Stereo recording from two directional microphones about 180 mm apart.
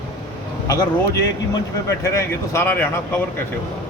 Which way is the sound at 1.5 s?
15° left (ahead or behind).